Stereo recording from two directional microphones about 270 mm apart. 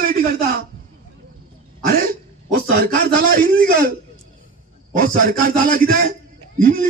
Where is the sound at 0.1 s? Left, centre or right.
Right.